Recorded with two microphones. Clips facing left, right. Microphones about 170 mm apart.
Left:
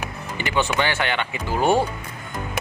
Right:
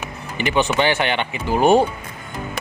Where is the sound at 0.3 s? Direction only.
20° right (ahead or behind).